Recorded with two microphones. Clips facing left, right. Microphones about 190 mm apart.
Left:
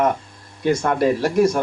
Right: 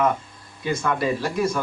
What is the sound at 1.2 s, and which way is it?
Speech, 75° left (ahead or behind).